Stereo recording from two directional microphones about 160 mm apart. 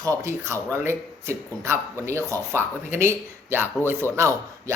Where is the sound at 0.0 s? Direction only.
20° right (ahead or behind).